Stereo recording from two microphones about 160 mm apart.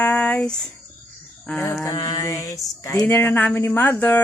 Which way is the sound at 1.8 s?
20° left (ahead or behind).